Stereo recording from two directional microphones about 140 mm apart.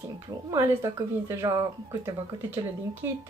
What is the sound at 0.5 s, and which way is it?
Speech, 20° right (ahead or behind).